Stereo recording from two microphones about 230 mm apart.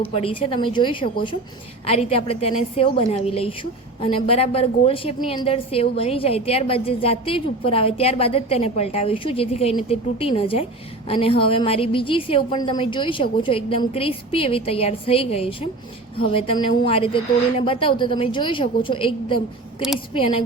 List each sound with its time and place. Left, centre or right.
0.1 s a woman's voice: left